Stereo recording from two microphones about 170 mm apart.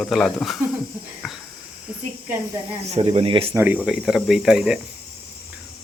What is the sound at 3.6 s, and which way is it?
Speech, 10° right (ahead or behind).